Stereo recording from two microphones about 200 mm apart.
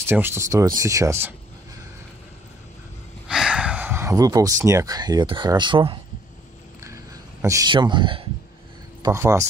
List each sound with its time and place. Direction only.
0.1 s speech: 10° right (ahead or behind)
3.3 s speech: 5° right (ahead or behind); by 5.9 s 25° right (ahead or behind)
7.4 s speech: 20° right (ahead or behind)